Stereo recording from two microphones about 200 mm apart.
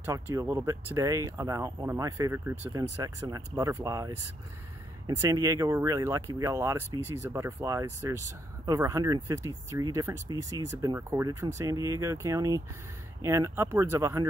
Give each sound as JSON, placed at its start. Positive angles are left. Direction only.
{"t": 0.0, "sound": "speech", "side_deg": -15}